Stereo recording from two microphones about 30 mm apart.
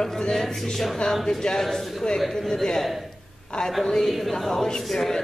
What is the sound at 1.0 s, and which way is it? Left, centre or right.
Speech, left.